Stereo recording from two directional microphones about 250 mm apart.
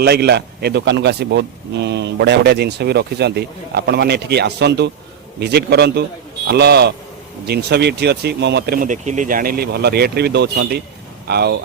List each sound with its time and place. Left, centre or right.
0.0 s speech: right